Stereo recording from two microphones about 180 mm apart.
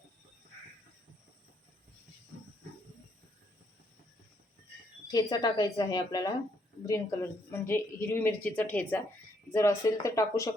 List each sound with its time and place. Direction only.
5.1 s a woman's voice: 20° left (ahead or behind)